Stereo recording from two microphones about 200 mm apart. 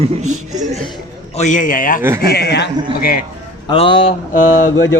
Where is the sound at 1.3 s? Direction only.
40° left (ahead or behind).